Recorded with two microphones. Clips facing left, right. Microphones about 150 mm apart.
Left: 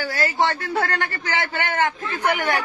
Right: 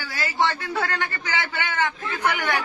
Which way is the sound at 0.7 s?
45° left (ahead or behind).